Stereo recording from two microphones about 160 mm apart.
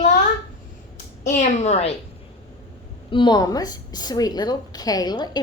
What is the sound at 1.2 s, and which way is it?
Speech, 45° left (ahead or behind).